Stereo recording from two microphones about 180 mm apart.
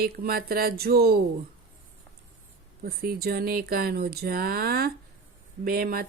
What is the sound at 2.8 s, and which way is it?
Speech, 55° right (ahead or behind).